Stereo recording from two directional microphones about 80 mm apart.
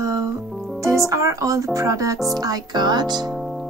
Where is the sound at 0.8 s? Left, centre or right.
Right.